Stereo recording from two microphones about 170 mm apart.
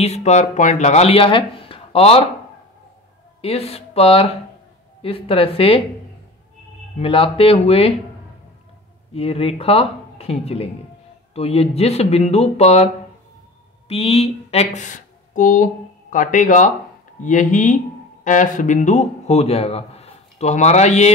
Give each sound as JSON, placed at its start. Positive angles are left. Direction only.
{"t": 0.0, "sound": "speech", "side_deg": 40}
{"t": 3.3, "sound": "speech", "side_deg": 35}
{"t": 7.0, "sound": "speech", "side_deg": 30}
{"t": 9.1, "sound": "speech", "side_deg": 35}